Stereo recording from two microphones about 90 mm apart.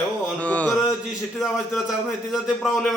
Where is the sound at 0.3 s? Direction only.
15° left (ahead or behind).